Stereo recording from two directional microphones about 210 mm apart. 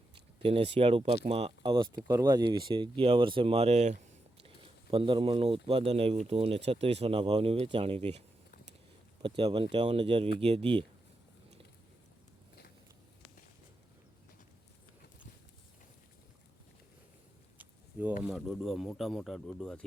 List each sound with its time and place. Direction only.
0.4 s speech: 25° right (ahead or behind)
9.2 s speech: 25° right (ahead or behind)
18.2 s speech: 5° right (ahead or behind)